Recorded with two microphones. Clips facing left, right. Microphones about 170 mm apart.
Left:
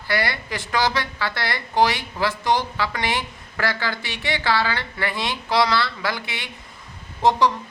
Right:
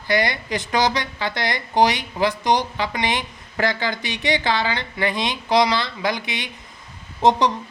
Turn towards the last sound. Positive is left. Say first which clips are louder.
# right 2 dB
turn(degrees=-20)  # may be behind; listen again after turning